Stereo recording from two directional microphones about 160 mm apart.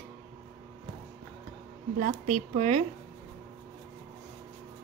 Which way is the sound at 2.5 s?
40° right (ahead or behind).